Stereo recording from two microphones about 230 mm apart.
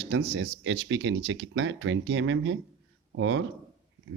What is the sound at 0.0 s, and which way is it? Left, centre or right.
A man's voice, right.